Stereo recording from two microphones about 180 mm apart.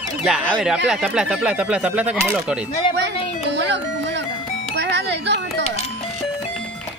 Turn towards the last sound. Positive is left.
turn(degrees=-75)  # may be behind; listen again after turning